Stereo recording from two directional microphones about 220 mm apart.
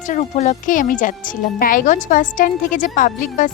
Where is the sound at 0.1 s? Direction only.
30° left (ahead or behind).